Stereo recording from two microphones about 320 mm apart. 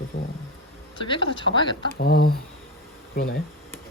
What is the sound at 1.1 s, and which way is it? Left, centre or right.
Speech, centre.